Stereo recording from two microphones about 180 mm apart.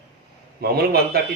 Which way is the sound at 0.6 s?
60° right (ahead or behind).